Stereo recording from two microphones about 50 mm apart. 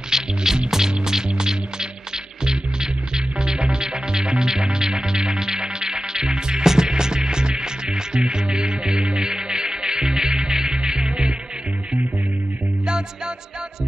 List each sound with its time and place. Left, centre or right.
0.1 s music: centre